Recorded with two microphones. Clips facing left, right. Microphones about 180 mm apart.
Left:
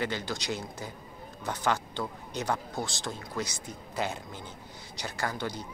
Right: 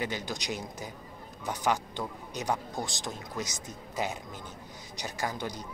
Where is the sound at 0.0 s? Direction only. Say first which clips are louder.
Left 1 dB; 15° right (ahead or behind).